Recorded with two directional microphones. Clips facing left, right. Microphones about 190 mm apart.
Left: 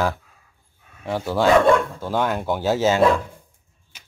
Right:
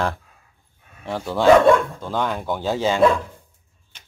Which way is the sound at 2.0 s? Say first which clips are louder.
Left 2 dB; 10° left (ahead or behind).